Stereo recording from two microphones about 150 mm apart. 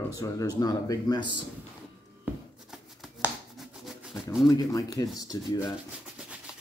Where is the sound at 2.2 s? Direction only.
5° right (ahead or behind).